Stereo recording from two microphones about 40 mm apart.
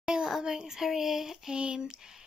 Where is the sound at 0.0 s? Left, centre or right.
Centre.